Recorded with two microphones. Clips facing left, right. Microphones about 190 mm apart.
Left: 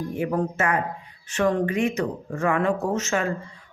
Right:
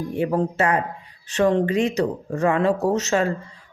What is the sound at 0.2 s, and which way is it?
Speech, 30° right (ahead or behind).